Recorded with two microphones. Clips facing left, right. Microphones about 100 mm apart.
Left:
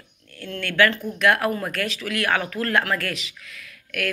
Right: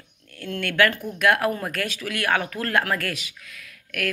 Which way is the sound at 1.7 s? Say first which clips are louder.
Left 1 dB; 45° right (ahead or behind).